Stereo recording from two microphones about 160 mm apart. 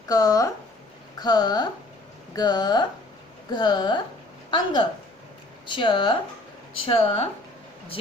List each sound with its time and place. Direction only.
0.1 s speech: 20° left (ahead or behind)